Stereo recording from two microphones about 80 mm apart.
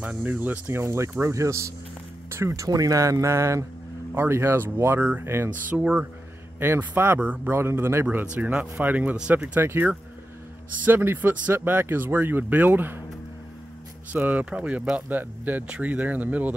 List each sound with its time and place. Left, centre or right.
0.0 s speech: right
14.1 s speech: right